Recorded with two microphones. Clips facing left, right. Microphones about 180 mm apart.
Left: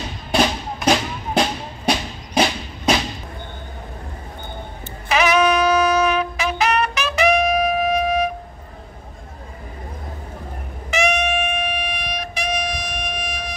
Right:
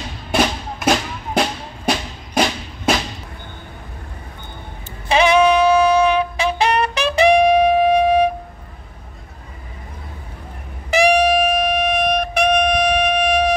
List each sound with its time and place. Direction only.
0.3 s music: centre (ahead or behind)
5.0 s saxophone: 30° right (ahead or behind)
10.9 s music: 35° right (ahead or behind); by 13.6 s 65° right (ahead or behind)